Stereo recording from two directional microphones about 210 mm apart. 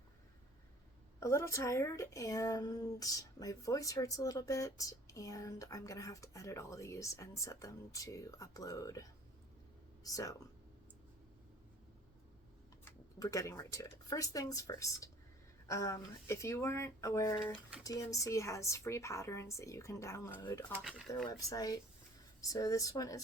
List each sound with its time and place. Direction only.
1.2 s speech: 15° left (ahead or behind)
12.8 s speech: 15° left (ahead or behind)